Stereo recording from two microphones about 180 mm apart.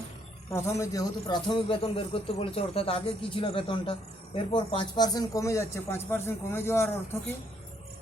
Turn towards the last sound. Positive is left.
turn(degrees=15)  # may be behind; listen again after turning